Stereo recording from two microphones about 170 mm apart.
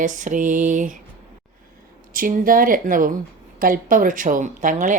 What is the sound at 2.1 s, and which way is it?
A woman's voice, 55° right (ahead or behind).